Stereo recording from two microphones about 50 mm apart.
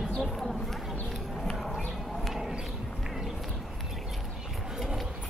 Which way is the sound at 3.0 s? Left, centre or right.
Centre.